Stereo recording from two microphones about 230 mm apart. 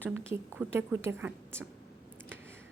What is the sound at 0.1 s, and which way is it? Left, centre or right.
A woman's voice, centre.